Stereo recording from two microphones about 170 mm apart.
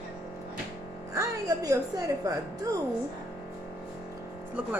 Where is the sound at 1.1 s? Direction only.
20° right (ahead or behind).